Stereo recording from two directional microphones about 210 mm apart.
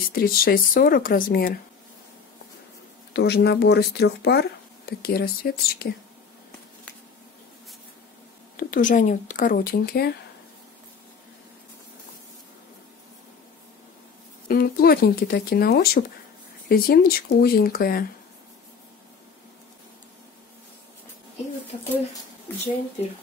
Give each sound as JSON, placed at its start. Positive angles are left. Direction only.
{"t": 0.1, "sound": "speech", "side_deg": 45}
{"t": 3.1, "sound": "speech", "side_deg": 50}
{"t": 8.5, "sound": "speech", "side_deg": 40}
{"t": 14.5, "sound": "speech", "side_deg": 45}
{"t": 22.5, "sound": "speech", "side_deg": 10}